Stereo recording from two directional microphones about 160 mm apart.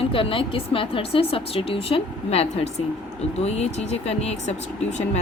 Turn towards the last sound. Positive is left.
turn(degrees=45)  # may be behind; listen again after turning